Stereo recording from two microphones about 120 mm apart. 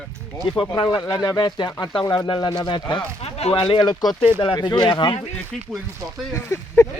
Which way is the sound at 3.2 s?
55° left (ahead or behind).